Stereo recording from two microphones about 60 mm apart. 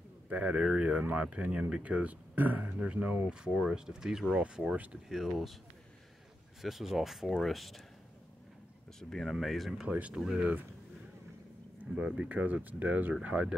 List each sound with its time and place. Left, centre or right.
0.3 s speech: right; by 5.6 s centre
6.6 s speech: centre
9.1 s speech: centre
9.8 s speech: right
11.9 s speech: centre
12.2 s speech: right